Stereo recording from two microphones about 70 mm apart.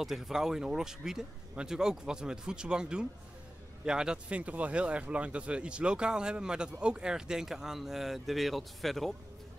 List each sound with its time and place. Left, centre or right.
0.0 s speech: centre